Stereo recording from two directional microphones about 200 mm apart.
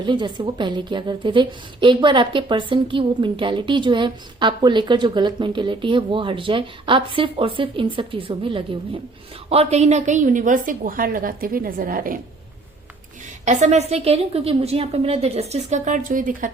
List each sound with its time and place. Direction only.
0.0 s a woman's voice: 25° right (ahead or behind); by 12.2 s 45° right (ahead or behind)
13.4 s a woman's voice: 35° right (ahead or behind)